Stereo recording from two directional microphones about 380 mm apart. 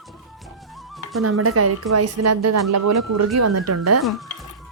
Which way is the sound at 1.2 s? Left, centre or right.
Right.